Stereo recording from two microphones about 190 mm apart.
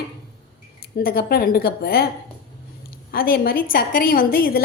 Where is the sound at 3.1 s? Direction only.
50° left (ahead or behind).